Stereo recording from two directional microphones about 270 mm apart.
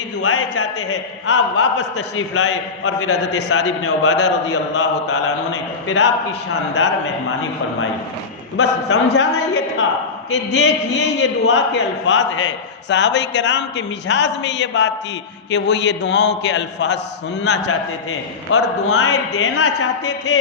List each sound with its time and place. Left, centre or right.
0.2 s a man's voice: left
8.5 s a man's voice: left
10.5 s a man's voice: left